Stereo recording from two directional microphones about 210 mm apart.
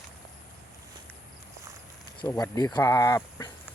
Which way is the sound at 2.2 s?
15° left (ahead or behind).